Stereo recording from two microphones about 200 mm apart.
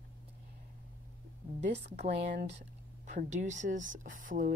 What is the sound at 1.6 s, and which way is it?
Speech, 35° right (ahead or behind).